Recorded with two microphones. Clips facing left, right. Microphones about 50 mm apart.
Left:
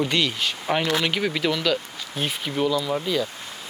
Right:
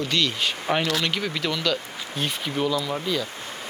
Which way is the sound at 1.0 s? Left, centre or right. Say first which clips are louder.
Left 3 dB; centre.